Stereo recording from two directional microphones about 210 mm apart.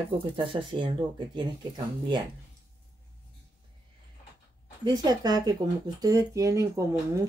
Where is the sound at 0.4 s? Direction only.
20° right (ahead or behind).